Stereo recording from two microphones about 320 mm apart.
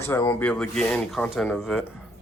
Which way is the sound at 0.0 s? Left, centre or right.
Centre.